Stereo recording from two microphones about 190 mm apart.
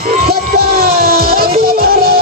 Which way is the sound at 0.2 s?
55° right (ahead or behind).